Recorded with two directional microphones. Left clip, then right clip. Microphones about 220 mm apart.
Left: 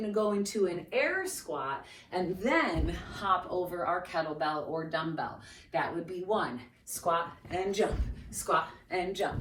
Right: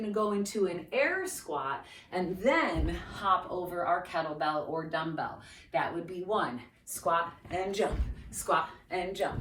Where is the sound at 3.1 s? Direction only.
30° right (ahead or behind).